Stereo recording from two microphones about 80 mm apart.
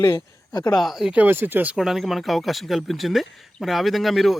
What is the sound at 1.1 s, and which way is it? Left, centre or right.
Speech, right.